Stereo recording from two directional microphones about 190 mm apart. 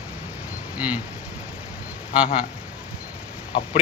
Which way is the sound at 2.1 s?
5° right (ahead or behind).